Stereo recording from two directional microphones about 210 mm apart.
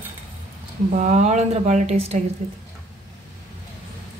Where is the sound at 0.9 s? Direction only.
35° right (ahead or behind).